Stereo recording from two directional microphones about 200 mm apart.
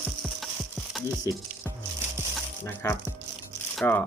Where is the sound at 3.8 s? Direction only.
10° left (ahead or behind).